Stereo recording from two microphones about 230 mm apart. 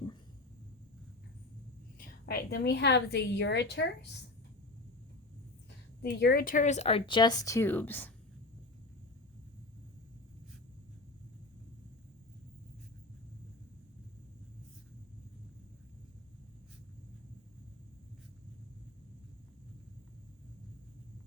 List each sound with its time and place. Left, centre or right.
2.0 s a woman's voice: left
6.0 s speech: left; by 8.1 s centre